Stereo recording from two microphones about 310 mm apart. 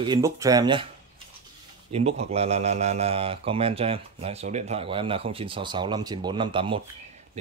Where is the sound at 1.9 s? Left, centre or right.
Centre.